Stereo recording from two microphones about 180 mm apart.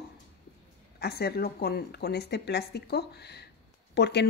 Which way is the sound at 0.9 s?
60° left (ahead or behind).